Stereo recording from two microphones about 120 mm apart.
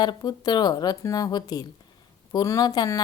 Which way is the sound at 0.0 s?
35° left (ahead or behind).